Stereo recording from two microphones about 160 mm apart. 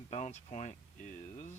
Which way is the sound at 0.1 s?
45° left (ahead or behind).